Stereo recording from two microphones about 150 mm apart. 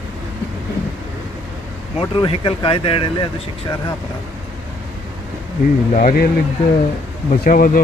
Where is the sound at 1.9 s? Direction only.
35° left (ahead or behind).